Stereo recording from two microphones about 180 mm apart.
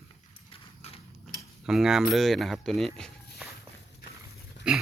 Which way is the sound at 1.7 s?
Centre (ahead or behind).